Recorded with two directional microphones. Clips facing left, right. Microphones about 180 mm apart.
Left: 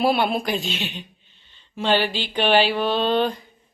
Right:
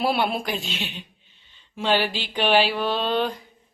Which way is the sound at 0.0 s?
Centre (ahead or behind).